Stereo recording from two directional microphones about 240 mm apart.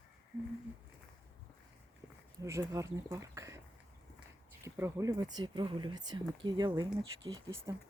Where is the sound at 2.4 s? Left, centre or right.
Centre.